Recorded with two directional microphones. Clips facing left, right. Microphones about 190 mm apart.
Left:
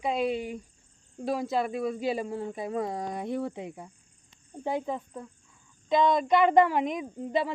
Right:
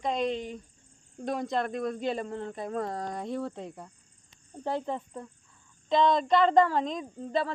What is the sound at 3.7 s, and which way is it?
Cricket, 5° left (ahead or behind).